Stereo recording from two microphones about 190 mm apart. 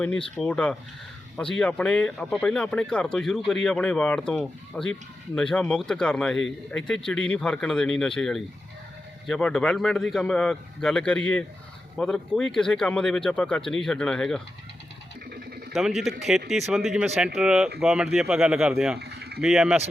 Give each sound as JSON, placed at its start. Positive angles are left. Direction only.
{"t": 0.0, "sound": "speech", "side_deg": 5}
{"t": 15.7, "sound": "speech", "side_deg": 0}
{"t": 18.9, "sound": "speech", "side_deg": -60}
{"t": 19.4, "sound": "speech", "side_deg": -5}